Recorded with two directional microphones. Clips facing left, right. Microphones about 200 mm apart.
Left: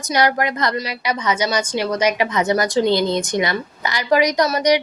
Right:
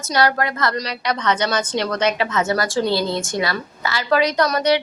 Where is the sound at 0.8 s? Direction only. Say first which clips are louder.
Even; 5° left (ahead or behind).